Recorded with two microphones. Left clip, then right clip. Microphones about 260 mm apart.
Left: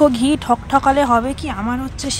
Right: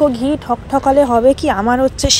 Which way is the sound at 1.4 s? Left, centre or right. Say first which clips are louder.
Right 10 dB; centre.